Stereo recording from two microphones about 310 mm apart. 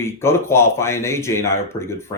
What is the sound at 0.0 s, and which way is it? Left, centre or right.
Speech, centre.